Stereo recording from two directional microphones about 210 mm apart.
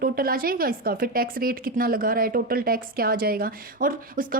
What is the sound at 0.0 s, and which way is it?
A woman's voice, 45° right (ahead or behind).